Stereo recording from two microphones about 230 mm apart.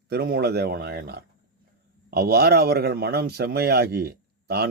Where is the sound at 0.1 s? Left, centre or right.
Right.